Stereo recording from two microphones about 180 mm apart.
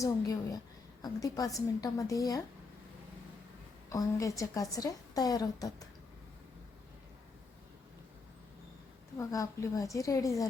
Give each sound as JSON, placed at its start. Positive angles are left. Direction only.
{"t": 0.0, "sound": "a woman's voice", "side_deg": 20}
{"t": 3.9, "sound": "a woman's voice", "side_deg": 20}
{"t": 9.1, "sound": "a woman's voice", "side_deg": 15}